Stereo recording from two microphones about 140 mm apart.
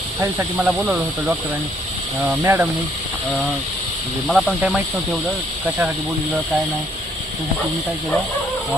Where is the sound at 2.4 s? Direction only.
15° right (ahead or behind).